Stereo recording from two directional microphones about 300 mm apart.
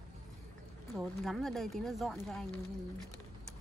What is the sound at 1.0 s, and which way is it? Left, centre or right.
Speech, centre.